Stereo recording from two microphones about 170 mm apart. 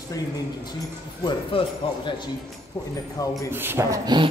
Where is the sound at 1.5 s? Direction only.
30° left (ahead or behind).